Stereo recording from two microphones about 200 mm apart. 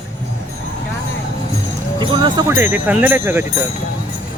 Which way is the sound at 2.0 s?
20° right (ahead or behind).